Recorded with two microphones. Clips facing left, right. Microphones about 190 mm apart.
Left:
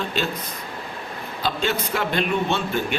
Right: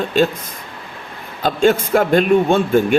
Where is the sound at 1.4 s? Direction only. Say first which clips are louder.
Right 10 dB; 50° right (ahead or behind).